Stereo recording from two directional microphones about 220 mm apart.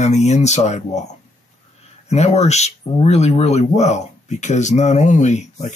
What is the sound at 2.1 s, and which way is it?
Speech, 30° left (ahead or behind).